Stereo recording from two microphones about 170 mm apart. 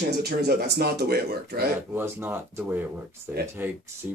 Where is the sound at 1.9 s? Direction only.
10° right (ahead or behind).